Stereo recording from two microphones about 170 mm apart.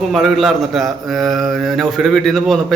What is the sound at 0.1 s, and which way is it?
A man's voice, centre (ahead or behind).